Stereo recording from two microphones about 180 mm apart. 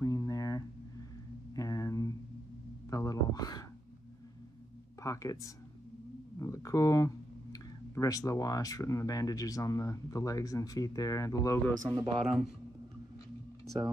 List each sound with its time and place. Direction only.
0.0 s a sound: 20° left (ahead or behind)
5.0 s speech: 20° left (ahead or behind)
12.2 s speech: centre (ahead or behind)